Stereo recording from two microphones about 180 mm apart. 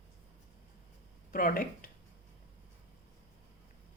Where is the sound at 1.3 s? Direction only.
50° left (ahead or behind).